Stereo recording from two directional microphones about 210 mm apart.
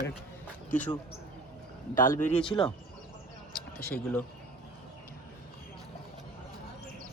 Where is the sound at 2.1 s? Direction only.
10° left (ahead or behind).